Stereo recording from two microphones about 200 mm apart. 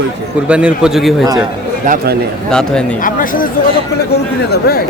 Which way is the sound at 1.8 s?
40° right (ahead or behind).